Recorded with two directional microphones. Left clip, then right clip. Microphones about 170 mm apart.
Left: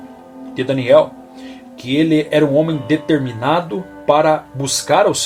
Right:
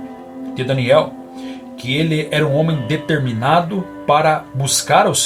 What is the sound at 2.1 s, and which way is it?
Speech, 45° left (ahead or behind).